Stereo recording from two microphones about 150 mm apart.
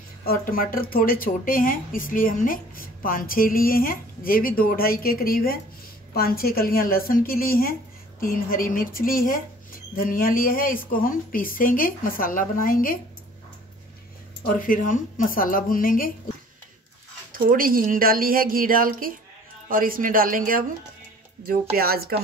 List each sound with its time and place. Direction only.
0.2 s speech: 75° left (ahead or behind)
14.5 s a woman's voice: 65° left (ahead or behind)
17.3 s a woman's voice: 70° right (ahead or behind)
21.7 s speech: 90° right